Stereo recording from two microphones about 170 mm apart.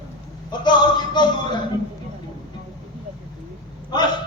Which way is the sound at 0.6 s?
25° left (ahead or behind).